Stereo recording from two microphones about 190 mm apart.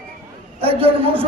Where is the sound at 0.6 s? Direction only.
30° right (ahead or behind).